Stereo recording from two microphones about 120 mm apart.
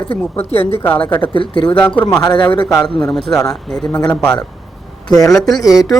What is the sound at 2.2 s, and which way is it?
Speech, 40° left (ahead or behind).